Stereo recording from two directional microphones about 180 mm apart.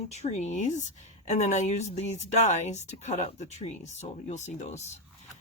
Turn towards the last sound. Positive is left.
turn(degrees=40)  # may be behind; listen again after turning